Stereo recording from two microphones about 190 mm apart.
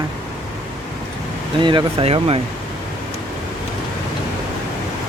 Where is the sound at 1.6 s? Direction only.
25° right (ahead or behind).